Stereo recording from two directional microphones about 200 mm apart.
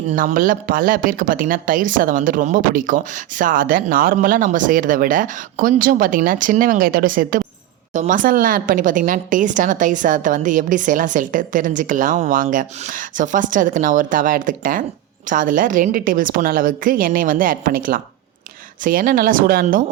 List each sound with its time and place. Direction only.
0.1 s a woman's voice: 40° right (ahead or behind)